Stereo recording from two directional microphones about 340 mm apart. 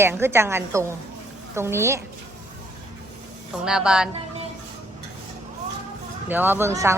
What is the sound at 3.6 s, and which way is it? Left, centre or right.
Speech, centre.